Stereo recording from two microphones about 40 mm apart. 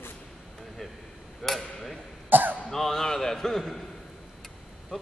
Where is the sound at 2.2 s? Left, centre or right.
Right.